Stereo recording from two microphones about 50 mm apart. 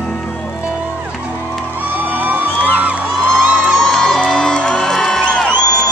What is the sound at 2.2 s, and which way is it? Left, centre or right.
Music, right.